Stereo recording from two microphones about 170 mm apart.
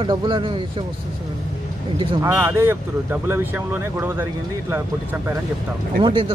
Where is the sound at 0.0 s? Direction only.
25° right (ahead or behind).